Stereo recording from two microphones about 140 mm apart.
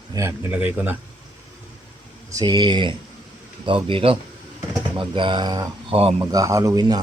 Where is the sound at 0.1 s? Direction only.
20° right (ahead or behind).